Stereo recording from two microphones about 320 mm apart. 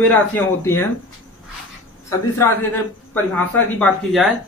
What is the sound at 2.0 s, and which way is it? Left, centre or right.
A man's voice, centre.